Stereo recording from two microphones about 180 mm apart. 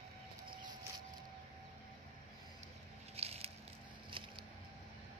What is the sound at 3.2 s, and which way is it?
Biting, 35° right (ahead or behind).